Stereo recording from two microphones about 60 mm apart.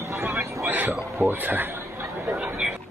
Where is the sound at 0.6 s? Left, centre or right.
Right.